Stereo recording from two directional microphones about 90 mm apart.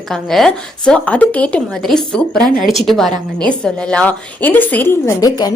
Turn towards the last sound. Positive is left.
turn(degrees=45)  # may be behind; listen again after turning